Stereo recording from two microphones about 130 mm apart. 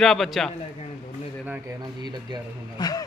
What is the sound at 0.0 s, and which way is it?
Speech, centre (ahead or behind).